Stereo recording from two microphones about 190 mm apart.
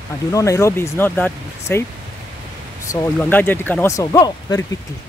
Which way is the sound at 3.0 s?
10° left (ahead or behind).